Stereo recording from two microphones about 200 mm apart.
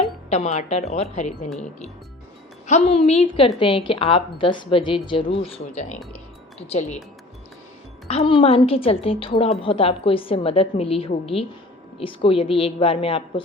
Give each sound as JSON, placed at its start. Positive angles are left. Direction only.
{"t": 0.3, "sound": "a woman's voice", "side_deg": 35}
{"t": 2.6, "sound": "a woman's voice", "side_deg": 30}
{"t": 8.0, "sound": "a woman's voice", "side_deg": 25}